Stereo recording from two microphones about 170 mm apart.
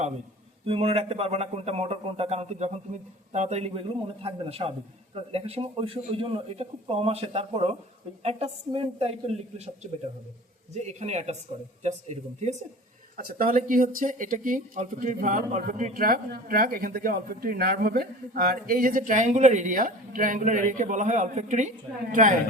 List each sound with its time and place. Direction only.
0.6 s speech: 35° right (ahead or behind)
10.8 s speech: 40° right (ahead or behind)
13.1 s speech: 55° right (ahead or behind)